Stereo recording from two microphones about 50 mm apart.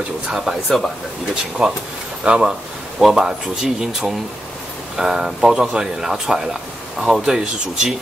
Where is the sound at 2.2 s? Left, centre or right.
Centre.